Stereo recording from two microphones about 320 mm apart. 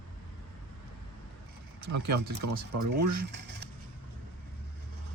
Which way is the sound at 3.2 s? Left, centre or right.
Right.